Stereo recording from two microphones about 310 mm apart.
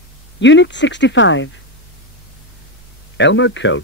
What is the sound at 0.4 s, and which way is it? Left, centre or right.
Speech, left.